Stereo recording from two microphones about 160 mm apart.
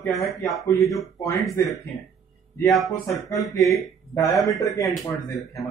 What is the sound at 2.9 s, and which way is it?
A man's voice, 20° left (ahead or behind).